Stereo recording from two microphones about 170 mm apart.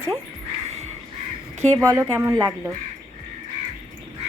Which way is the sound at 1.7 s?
15° right (ahead or behind).